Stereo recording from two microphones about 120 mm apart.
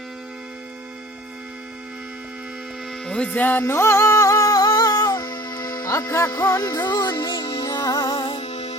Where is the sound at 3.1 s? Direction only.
10° left (ahead or behind); by 8.4 s 35° left (ahead or behind).